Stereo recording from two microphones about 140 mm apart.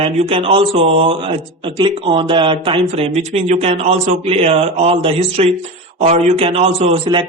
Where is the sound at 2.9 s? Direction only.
50° right (ahead or behind).